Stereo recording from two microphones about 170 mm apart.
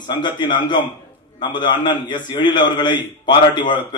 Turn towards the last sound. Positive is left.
turn(degrees=25)  # may be behind; listen again after turning